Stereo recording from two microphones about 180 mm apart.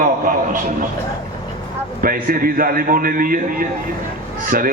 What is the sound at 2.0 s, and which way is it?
A man's voice, 50° right (ahead or behind).